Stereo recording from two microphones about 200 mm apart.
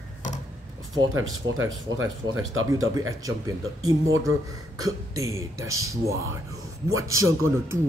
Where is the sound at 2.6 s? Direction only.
90° right.